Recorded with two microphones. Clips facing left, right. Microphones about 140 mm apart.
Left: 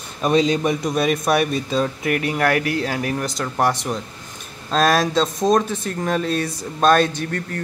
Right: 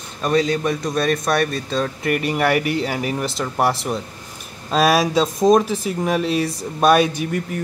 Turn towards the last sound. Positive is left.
turn(degrees=-10)  # may be behind; listen again after turning